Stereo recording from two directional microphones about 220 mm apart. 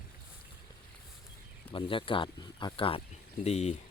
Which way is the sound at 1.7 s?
25° left (ahead or behind).